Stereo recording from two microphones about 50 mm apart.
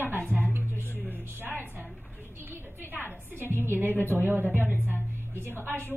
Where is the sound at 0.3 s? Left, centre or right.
Right.